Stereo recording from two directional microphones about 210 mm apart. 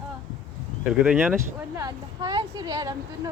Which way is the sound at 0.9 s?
Centre (ahead or behind).